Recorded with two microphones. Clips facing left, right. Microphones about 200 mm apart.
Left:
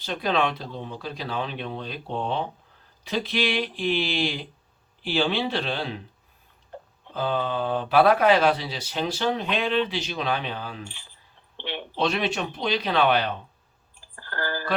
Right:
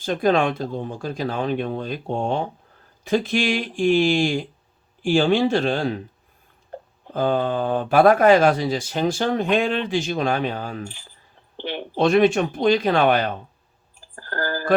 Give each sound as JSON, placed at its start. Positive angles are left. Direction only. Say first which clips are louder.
{"t": 0.0, "sound": "speech", "louder": "right 6 dB", "side_deg": -45}